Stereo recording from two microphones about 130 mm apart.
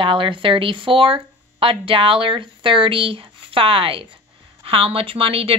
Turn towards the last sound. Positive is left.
turn(degrees=-45)  # may be behind; listen again after turning